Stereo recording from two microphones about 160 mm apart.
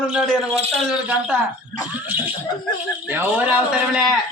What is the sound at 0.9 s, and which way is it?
Speech, 5° right (ahead or behind).